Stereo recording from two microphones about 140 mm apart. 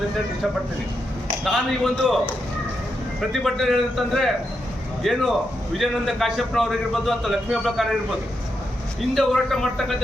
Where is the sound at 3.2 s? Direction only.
Centre (ahead or behind).